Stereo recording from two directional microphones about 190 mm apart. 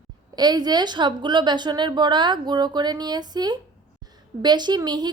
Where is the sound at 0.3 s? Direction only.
20° right (ahead or behind).